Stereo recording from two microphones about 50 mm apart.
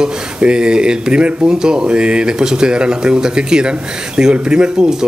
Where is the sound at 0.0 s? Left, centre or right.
Centre.